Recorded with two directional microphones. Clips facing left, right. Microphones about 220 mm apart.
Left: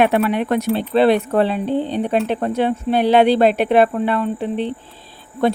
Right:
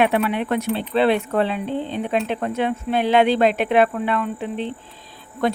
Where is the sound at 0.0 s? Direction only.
45° left (ahead or behind).